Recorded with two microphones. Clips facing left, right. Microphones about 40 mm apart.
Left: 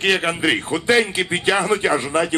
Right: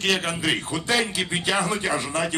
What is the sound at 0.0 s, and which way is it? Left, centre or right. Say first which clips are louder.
A man's voice: left 5 dB; left.